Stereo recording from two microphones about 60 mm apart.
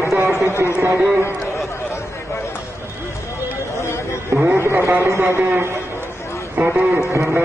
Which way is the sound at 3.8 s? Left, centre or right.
Left.